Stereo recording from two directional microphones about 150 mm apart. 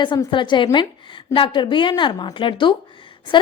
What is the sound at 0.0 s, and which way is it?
A woman's voice, 30° left (ahead or behind).